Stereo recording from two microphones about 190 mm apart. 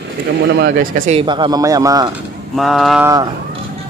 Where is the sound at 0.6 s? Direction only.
45° right (ahead or behind).